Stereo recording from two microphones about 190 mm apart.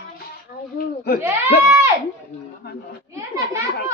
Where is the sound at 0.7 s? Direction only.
55° left (ahead or behind).